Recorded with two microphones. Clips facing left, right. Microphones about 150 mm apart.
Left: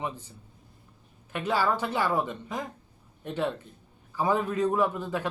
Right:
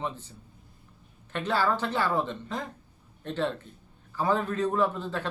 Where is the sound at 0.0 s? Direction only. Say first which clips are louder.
Even; 10° left (ahead or behind).